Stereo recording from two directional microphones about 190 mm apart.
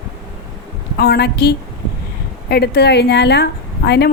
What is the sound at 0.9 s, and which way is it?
A woman's voice, 60° left (ahead or behind).